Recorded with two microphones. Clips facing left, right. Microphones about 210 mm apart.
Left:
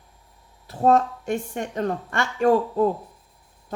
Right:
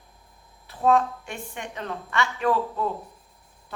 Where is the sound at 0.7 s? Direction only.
45° left (ahead or behind).